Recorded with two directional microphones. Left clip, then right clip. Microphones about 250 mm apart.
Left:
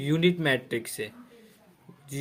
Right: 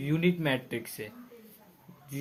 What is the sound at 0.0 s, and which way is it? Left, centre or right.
Speech, left.